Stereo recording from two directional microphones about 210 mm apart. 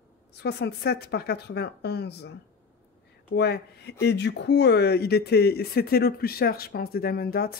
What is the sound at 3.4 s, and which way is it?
Speech, 50° left (ahead or behind).